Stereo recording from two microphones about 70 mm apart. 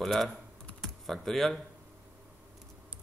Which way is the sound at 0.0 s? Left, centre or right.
Centre.